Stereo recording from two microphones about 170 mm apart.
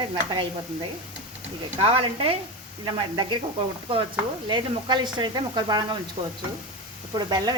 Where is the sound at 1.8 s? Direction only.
35° right (ahead or behind).